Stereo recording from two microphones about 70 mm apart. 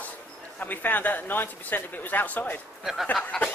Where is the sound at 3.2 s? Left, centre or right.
Left.